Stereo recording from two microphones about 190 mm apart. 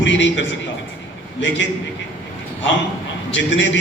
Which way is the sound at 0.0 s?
75° left (ahead or behind).